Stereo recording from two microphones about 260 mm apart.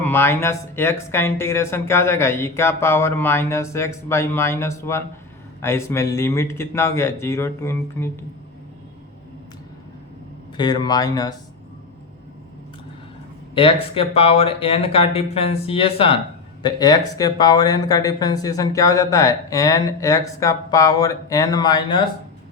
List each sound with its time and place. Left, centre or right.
0.0 s speech: centre
10.6 s speech: centre
13.5 s speech: left